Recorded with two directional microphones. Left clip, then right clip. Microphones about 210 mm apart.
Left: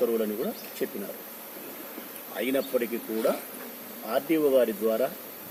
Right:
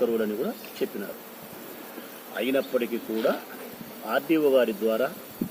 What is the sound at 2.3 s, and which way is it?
Speech, centre (ahead or behind).